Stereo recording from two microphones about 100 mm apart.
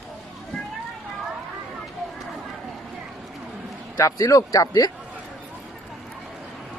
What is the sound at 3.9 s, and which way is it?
Speech, 30° left (ahead or behind).